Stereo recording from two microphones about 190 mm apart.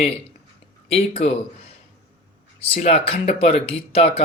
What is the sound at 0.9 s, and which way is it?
Speech, 30° left (ahead or behind).